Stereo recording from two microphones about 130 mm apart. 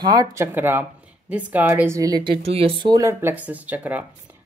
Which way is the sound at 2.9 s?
25° right (ahead or behind).